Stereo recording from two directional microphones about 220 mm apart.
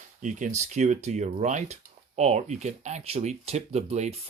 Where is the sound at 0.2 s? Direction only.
35° right (ahead or behind).